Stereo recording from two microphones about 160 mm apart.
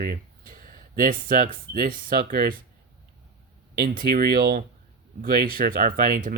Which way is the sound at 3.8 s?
65° right (ahead or behind).